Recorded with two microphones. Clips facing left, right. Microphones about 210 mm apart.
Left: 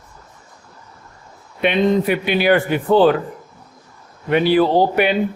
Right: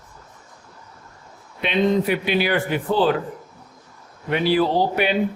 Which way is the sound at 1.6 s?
60° left (ahead or behind).